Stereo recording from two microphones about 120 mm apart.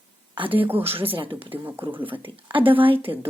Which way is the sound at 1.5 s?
15° right (ahead or behind).